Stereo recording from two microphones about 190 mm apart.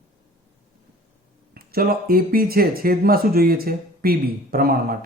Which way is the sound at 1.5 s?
55° right (ahead or behind).